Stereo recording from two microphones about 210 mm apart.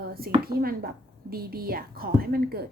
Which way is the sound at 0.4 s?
45° right (ahead or behind).